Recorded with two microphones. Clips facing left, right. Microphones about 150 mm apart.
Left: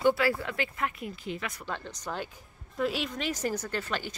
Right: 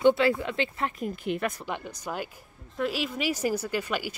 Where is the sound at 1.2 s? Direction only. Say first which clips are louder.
Right 7 dB; 65° right (ahead or behind).